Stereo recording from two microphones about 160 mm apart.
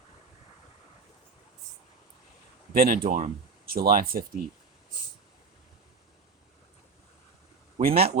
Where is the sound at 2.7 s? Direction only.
70° right (ahead or behind).